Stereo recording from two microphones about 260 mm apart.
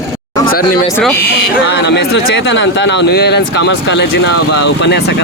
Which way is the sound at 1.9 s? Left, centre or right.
Left.